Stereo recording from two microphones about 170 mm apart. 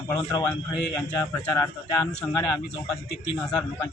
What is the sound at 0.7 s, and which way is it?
A man's voice, 15° left (ahead or behind).